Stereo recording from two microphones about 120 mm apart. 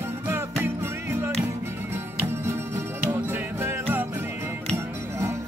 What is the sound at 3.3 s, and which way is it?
Music, 20° right (ahead or behind).